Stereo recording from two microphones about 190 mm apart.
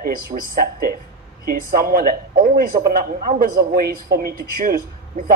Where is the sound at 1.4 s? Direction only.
50° right (ahead or behind).